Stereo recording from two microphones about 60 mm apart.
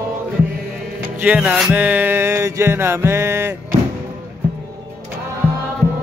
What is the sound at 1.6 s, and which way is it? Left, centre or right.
Music, right.